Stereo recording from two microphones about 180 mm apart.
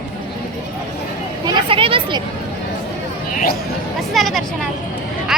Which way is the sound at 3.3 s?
50° left (ahead or behind).